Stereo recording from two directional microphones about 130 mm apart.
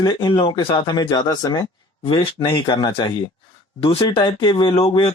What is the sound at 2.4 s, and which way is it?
Speech, 35° left (ahead or behind).